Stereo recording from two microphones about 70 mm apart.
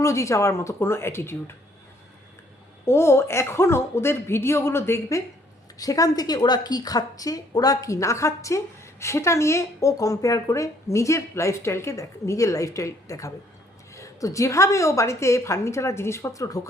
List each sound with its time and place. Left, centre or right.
0.0 s a woman's voice: left
2.8 s speech: left
5.7 s a woman's voice: left